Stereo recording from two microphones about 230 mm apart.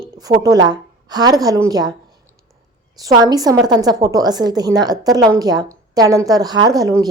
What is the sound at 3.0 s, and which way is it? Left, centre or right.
A woman's voice, centre.